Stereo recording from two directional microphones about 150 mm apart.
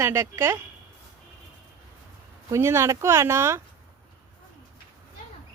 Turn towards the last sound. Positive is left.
turn(degrees=-15)  # may be behind; listen again after turning